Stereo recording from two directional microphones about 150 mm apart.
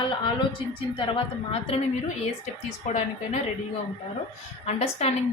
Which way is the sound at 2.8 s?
50° left (ahead or behind).